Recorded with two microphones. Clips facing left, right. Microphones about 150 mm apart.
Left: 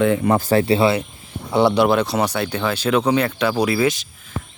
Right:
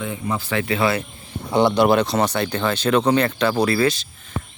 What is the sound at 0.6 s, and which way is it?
Speech, 30° left (ahead or behind).